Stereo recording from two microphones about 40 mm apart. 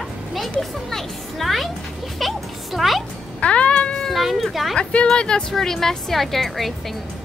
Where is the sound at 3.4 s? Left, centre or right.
Left.